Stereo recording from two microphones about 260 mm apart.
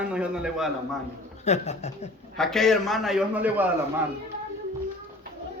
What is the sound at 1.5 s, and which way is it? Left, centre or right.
Speech, left.